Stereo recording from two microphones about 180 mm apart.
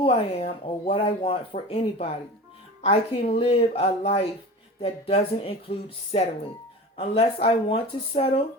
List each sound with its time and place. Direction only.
0.0 s speech: 35° left (ahead or behind)